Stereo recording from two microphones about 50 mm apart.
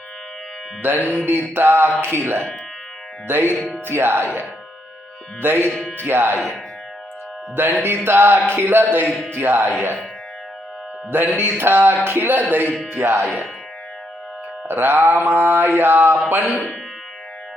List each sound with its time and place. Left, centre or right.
0.8 s music: right
1.0 s music: left
1.3 s mantra: right
5.4 s mantra: right
7.5 s mantra: right
11.1 s mantra: right
12.7 s music: centre
13.0 s mantra: right
14.7 s mantra: right
16.5 s speech: centre